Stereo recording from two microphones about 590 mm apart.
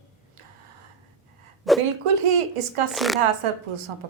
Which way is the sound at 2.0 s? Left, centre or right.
Right.